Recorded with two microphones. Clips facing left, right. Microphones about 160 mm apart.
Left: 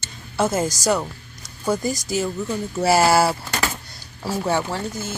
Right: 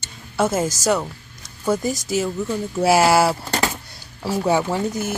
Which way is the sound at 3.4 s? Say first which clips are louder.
Right 3 dB; 30° right (ahead or behind).